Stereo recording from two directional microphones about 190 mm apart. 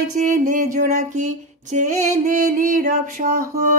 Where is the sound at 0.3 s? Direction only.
40° right (ahead or behind).